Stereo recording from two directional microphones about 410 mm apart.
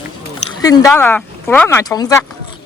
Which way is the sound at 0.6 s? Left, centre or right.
Centre.